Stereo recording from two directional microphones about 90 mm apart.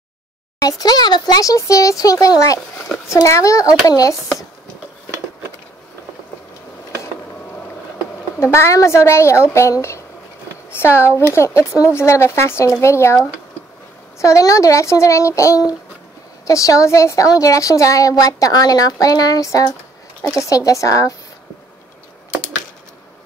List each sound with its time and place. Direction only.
0.6 s a woman's voice: 45° left (ahead or behind)
8.4 s a woman's voice: 30° left (ahead or behind)
14.2 s a woman's voice: 35° left (ahead or behind)